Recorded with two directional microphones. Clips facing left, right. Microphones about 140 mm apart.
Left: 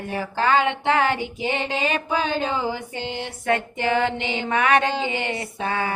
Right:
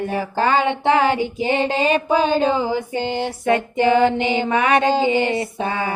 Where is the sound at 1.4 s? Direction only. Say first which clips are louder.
Right 6 dB; 35° right (ahead or behind).